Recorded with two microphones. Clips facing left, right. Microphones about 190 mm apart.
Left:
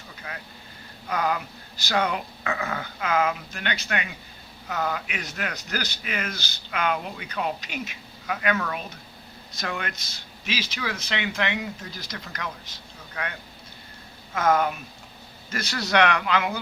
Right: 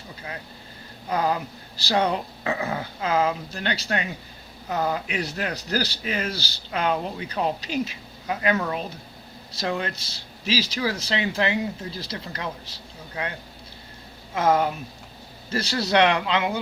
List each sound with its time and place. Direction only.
1.0 s a man's voice: 30° right (ahead or behind)
14.3 s a man's voice: 30° right (ahead or behind)